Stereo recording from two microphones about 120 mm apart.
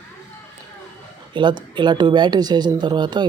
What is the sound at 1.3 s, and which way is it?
Speech, 40° right (ahead or behind).